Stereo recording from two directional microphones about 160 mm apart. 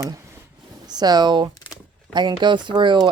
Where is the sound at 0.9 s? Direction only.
25° right (ahead or behind).